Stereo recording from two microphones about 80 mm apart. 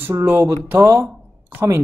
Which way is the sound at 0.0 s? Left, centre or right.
Right.